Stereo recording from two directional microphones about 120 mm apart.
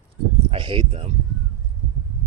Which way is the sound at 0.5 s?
50° right (ahead or behind).